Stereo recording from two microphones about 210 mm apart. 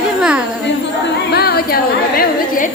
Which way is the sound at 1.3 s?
50° left (ahead or behind).